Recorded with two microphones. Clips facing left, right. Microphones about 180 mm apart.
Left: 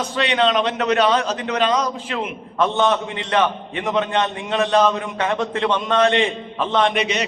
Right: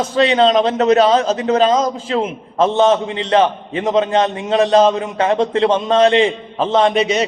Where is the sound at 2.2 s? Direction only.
35° right (ahead or behind).